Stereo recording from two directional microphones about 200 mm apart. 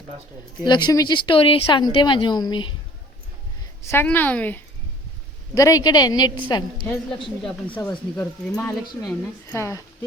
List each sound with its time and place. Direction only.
0.6 s speech: 20° left (ahead or behind)
3.8 s speech: 10° left (ahead or behind)
7.7 s speech: 20° left (ahead or behind)